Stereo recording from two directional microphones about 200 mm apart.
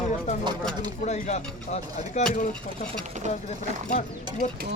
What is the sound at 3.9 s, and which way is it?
Speech, 40° left (ahead or behind).